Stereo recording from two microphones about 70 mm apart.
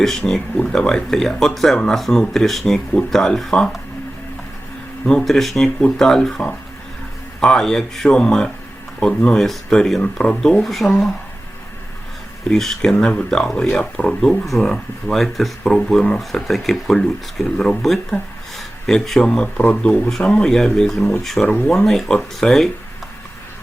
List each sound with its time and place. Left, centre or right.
0.0 s speech: centre
5.0 s speech: centre
12.5 s speech: centre
21.4 s speech: centre
21.7 s speech: centre